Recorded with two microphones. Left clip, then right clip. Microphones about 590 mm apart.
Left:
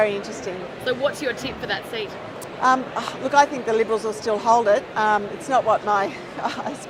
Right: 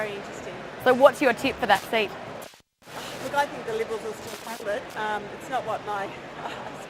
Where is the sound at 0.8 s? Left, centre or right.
Right.